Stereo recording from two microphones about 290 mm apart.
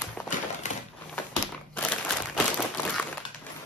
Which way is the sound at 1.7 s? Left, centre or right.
Centre.